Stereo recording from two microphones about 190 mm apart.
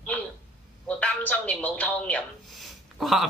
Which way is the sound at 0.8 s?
5° left (ahead or behind).